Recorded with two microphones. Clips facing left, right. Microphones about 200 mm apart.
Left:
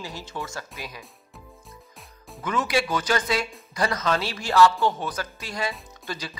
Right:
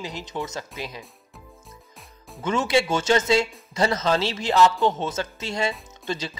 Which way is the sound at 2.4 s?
25° right (ahead or behind).